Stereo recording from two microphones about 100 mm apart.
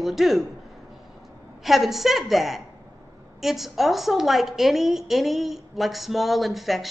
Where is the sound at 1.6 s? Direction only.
Centre (ahead or behind).